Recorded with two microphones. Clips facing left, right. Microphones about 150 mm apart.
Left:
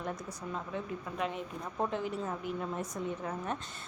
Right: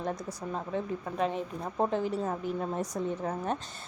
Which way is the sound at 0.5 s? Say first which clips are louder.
Right 5 dB; 35° right (ahead or behind).